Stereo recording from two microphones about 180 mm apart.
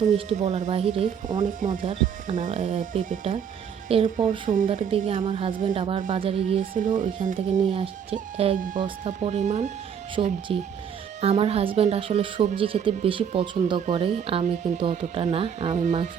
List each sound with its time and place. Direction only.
0.0 s speech: 40° right (ahead or behind)
3.8 s speech: 30° right (ahead or behind)
4.4 s speech: 45° right (ahead or behind)
4.9 s a woman's voice: 30° right (ahead or behind)
6.9 s speech: 45° right (ahead or behind)
7.5 s speech: 35° right (ahead or behind)
8.5 s speech: 50° right (ahead or behind)